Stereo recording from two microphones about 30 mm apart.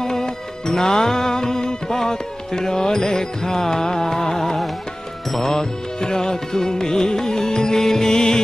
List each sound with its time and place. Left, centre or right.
0.0 s music: centre
5.6 s music: left